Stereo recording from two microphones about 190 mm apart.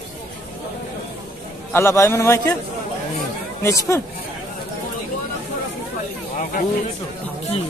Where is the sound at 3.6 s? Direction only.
15° left (ahead or behind).